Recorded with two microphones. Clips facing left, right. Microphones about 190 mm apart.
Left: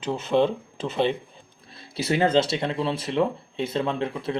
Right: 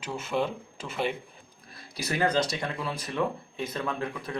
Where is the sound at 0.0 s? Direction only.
30° left (ahead or behind).